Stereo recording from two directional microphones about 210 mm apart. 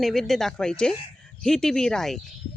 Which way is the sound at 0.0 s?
Centre (ahead or behind).